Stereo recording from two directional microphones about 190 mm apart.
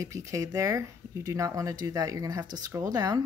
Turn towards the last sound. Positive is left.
turn(degrees=-20)  # may be behind; listen again after turning